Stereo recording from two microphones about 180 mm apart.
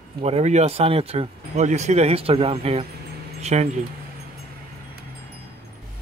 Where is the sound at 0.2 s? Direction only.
35° right (ahead or behind).